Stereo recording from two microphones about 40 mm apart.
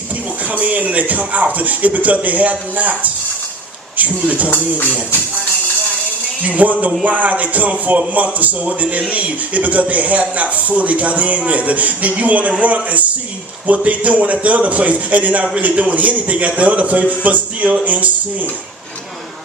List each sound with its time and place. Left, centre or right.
0.4 s a man's voice: right
6.4 s a man's voice: right